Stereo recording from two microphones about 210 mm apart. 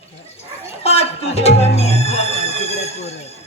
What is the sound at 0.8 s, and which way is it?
Music, 30° left (ahead or behind).